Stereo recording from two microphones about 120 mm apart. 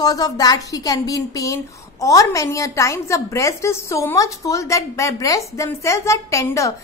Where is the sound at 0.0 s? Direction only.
30° left (ahead or behind).